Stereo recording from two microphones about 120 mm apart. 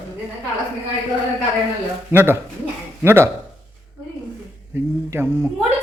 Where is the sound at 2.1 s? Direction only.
20° right (ahead or behind).